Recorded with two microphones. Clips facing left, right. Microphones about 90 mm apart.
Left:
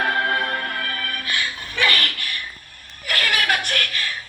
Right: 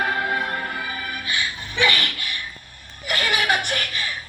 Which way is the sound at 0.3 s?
10° right (ahead or behind).